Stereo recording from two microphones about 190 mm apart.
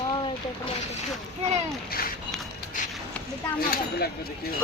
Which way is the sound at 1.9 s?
50° left (ahead or behind).